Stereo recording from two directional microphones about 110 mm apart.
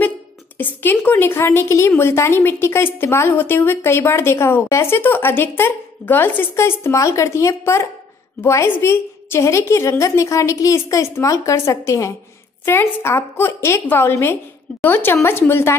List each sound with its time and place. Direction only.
0.7 s a woman's voice: 15° left (ahead or behind)